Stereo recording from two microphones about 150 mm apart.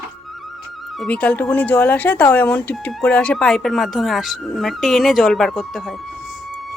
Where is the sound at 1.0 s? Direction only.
10° left (ahead or behind).